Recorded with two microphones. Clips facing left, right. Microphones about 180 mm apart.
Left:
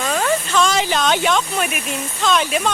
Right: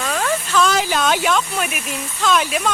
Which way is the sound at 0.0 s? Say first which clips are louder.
Left 2 dB; 5° left (ahead or behind).